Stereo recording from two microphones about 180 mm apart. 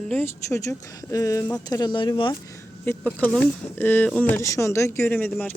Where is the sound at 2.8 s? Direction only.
10° left (ahead or behind).